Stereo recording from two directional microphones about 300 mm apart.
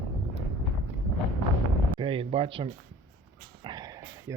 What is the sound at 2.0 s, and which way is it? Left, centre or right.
Speech, centre.